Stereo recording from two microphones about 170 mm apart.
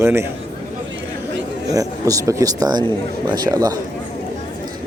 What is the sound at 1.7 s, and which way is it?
Speech, 20° right (ahead or behind).